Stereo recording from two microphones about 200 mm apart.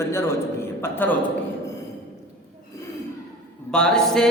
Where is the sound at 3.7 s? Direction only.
5° left (ahead or behind).